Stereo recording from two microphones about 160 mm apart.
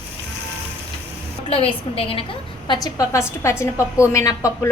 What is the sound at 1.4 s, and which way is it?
Child singing, 35° left (ahead or behind).